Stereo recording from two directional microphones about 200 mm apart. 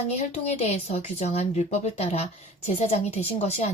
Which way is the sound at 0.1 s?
30° left (ahead or behind).